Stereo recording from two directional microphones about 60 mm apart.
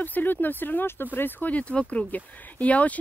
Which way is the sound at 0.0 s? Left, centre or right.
Left.